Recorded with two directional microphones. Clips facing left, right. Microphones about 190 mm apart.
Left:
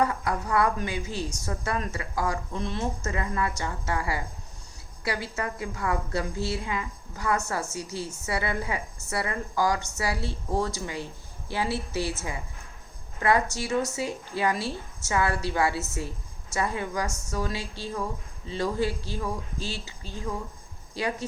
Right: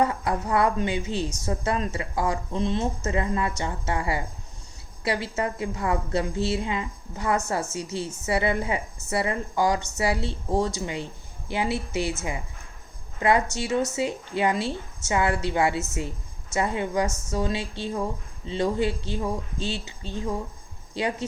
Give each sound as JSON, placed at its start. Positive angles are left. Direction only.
{"t": 0.0, "sound": "a woman's voice", "side_deg": -25}
{"t": 13.1, "sound": "a woman's voice", "side_deg": -20}